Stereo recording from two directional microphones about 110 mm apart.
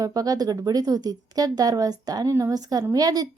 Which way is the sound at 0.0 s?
35° right (ahead or behind).